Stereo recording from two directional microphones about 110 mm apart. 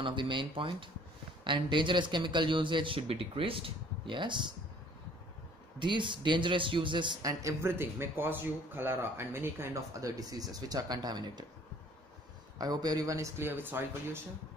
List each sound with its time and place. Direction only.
0.0 s speech: 50° right (ahead or behind)
5.8 s speech: 45° right (ahead or behind)
7.2 s speech: 30° right (ahead or behind)
12.5 s speech: 35° right (ahead or behind); by 14.2 s 20° right (ahead or behind)